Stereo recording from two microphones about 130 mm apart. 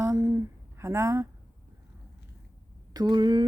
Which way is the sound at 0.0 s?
25° right (ahead or behind).